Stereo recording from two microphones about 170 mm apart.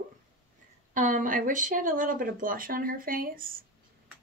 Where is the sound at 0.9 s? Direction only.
50° right (ahead or behind).